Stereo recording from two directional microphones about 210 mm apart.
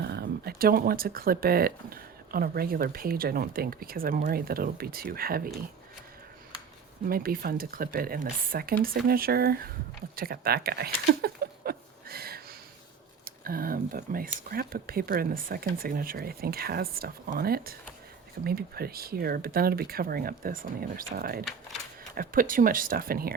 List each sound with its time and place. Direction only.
0.0 s speech: 50° right (ahead or behind)
7.1 s speech: 45° right (ahead or behind)
10.2 s a sound: 45° right (ahead or behind)
13.2 s speech: 45° right (ahead or behind)